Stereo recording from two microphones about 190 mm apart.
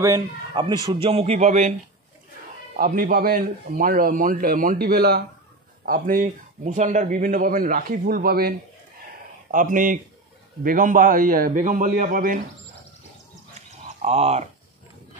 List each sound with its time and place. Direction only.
0.0 s a man's voice: 20° right (ahead or behind)
2.7 s speech: 50° right (ahead or behind)
13.6 s a sound: 35° right (ahead or behind)